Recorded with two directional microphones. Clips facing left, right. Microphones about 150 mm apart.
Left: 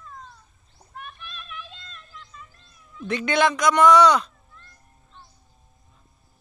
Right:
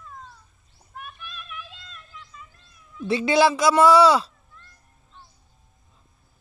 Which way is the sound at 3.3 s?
30° right (ahead or behind).